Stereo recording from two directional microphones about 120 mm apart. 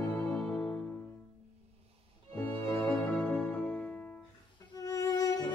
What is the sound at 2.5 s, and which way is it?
Music, 25° left (ahead or behind).